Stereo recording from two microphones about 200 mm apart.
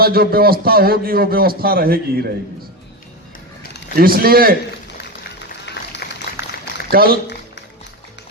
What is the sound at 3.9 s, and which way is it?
Speech, 45° right (ahead or behind).